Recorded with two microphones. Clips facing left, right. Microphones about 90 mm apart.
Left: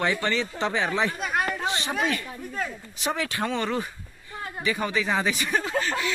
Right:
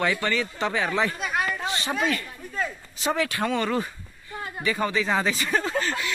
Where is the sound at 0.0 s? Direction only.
20° left (ahead or behind).